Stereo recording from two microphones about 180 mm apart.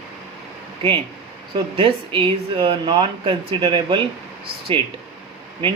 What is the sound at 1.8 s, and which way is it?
Speech, 30° right (ahead or behind).